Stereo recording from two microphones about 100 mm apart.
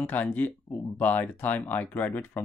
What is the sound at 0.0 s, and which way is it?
Speech, 15° left (ahead or behind).